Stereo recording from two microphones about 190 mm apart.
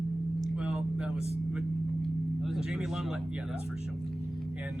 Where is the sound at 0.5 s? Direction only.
5° right (ahead or behind).